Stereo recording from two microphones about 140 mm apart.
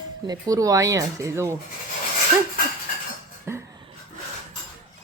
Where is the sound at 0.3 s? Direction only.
25° right (ahead or behind).